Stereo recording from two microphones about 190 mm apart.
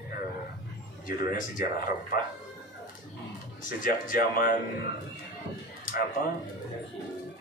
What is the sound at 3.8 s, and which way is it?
Speech, 45° left (ahead or behind).